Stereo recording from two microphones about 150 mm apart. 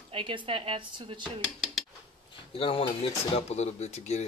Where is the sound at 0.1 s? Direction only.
35° right (ahead or behind).